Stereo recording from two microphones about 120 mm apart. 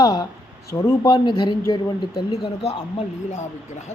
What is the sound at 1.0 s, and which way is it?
Speech, 40° left (ahead or behind).